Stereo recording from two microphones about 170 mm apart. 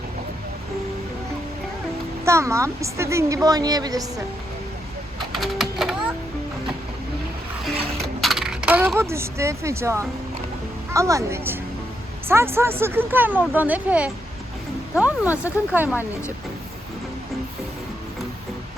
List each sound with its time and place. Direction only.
2.2 s a woman's voice: 15° right (ahead or behind)
5.3 s typing: centre (ahead or behind)
8.0 s coin: centre (ahead or behind); by 10.1 s 15° right (ahead or behind)
10.9 s a woman's voice: 20° right (ahead or behind)